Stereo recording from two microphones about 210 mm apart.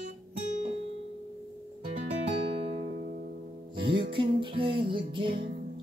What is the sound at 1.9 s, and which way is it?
Music, 30° right (ahead or behind).